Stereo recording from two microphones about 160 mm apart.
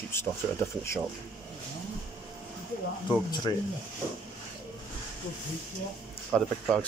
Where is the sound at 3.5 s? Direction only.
30° left (ahead or behind).